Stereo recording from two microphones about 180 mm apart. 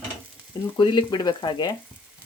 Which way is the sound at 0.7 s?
25° left (ahead or behind).